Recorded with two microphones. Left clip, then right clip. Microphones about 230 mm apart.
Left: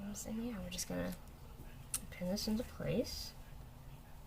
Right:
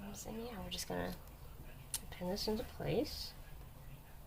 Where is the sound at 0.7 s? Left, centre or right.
Right.